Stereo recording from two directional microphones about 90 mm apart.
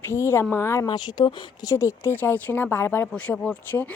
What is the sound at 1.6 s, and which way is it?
Speech, 35° left (ahead or behind).